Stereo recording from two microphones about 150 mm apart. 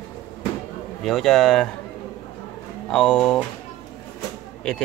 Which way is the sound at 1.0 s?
5° left (ahead or behind).